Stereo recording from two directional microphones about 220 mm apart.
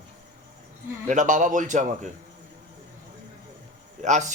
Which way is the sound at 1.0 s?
35° right (ahead or behind).